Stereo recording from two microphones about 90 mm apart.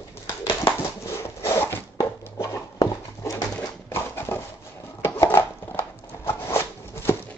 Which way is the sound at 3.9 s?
25° left (ahead or behind).